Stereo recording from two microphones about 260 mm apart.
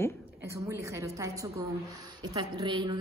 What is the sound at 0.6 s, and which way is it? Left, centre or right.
A woman's voice, centre.